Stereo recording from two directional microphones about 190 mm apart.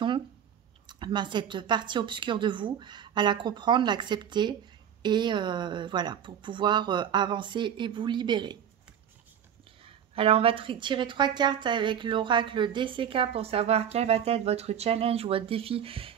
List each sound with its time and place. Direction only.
0.8 s speech: 25° right (ahead or behind)
9.8 s speech: 30° right (ahead or behind)